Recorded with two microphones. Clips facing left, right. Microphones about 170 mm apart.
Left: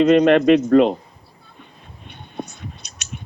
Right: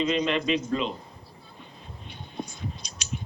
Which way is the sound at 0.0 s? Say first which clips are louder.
Left 13 dB; 65° left (ahead or behind).